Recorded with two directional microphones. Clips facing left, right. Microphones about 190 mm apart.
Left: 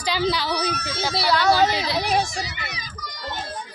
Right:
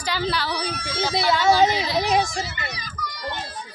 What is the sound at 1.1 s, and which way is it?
Speech, 20° right (ahead or behind).